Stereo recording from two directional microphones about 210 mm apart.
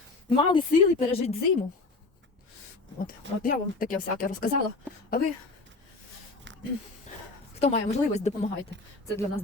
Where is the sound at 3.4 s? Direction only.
40° left (ahead or behind).